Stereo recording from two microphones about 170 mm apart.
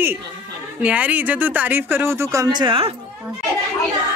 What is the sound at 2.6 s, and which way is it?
Speech, 30° right (ahead or behind).